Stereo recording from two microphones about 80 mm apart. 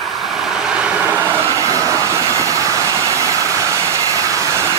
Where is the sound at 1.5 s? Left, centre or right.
Right.